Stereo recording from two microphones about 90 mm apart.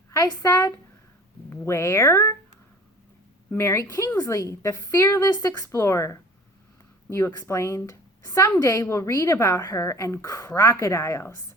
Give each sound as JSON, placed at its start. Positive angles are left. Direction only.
{"t": 0.1, "sound": "a woman's voice", "side_deg": 40}
{"t": 3.5, "sound": "a woman's voice", "side_deg": 30}
{"t": 7.3, "sound": "a woman's voice", "side_deg": 35}